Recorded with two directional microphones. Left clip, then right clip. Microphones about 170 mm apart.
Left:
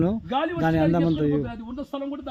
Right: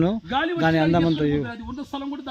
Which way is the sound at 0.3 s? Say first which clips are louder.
Right 2 dB; 30° left (ahead or behind).